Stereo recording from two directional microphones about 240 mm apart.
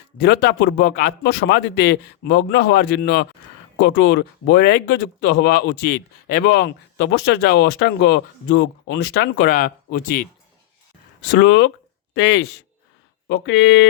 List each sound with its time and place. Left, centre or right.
0.2 s a man's voice: left
11.3 s speech: left